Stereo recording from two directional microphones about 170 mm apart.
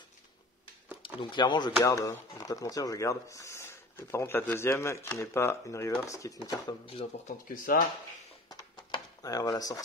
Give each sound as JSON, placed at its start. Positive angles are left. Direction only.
{"t": 1.0, "sound": "speech", "side_deg": 25}
{"t": 6.9, "sound": "speech", "side_deg": 35}
{"t": 7.4, "sound": "speech", "side_deg": 55}
{"t": 8.5, "sound": "a sound", "side_deg": 25}